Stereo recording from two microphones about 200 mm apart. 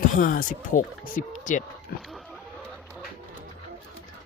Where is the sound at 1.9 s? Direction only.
50° left (ahead or behind).